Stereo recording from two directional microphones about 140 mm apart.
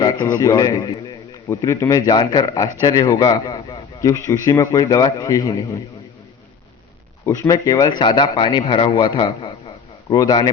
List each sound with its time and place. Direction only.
0.0 s a man's voice: 30° left (ahead or behind)
7.3 s a man's voice: 25° left (ahead or behind)